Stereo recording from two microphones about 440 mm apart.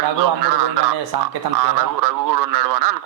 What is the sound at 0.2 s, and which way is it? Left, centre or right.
A man's voice, right.